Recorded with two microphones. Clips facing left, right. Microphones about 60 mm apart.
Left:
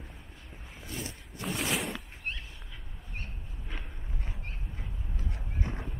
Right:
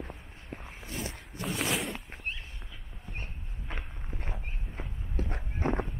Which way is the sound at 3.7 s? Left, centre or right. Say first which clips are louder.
Right 3 dB; right.